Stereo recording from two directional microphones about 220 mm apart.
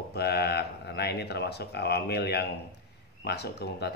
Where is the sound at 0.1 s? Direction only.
50° left (ahead or behind).